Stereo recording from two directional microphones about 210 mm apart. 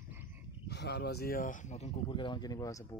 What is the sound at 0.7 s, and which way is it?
Speech, 55° left (ahead or behind).